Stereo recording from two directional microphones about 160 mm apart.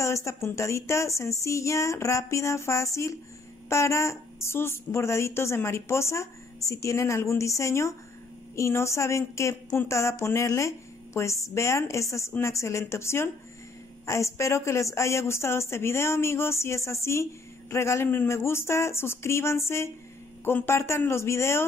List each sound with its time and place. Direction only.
0.0 s speech: 20° left (ahead or behind)